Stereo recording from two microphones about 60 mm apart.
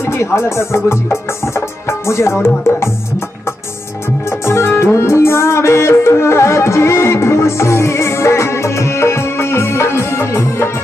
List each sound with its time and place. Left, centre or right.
0.0 s speech: left
1.9 s music: left
4.5 s music: left